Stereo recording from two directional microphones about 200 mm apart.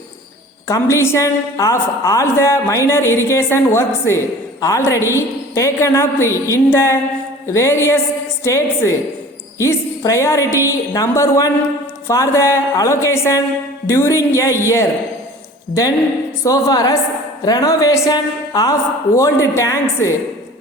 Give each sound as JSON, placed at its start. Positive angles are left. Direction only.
{"t": 0.7, "sound": "a woman's voice", "side_deg": 15}
{"t": 16.4, "sound": "a woman's voice", "side_deg": 15}